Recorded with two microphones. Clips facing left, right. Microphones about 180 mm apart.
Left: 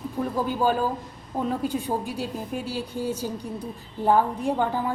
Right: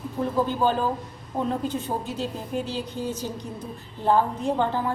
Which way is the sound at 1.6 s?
15° left (ahead or behind).